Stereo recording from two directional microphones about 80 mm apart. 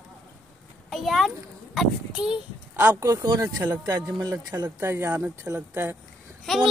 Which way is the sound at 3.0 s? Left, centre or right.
Right.